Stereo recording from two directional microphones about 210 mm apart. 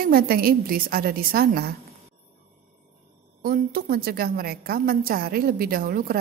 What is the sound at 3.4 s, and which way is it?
A woman's voice, 45° right (ahead or behind).